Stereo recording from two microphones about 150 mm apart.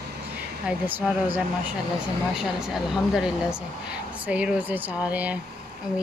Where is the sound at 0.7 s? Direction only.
10° right (ahead or behind).